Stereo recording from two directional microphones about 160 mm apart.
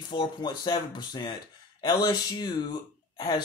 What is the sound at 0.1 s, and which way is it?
Speech, 30° left (ahead or behind).